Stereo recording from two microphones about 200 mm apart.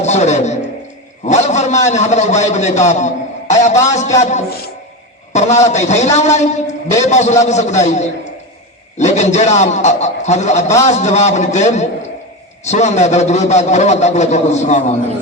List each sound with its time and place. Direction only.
0.0 s a man's voice: 35° left (ahead or behind)